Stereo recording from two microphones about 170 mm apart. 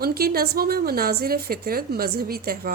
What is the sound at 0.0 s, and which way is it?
A woman's voice, 65° right (ahead or behind).